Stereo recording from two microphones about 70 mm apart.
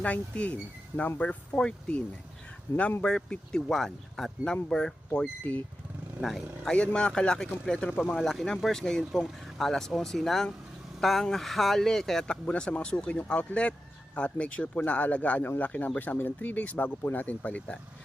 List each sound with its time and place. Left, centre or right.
0.0 s speech: centre
5.4 s speech: left
6.2 s speech: centre
6.7 s speech: centre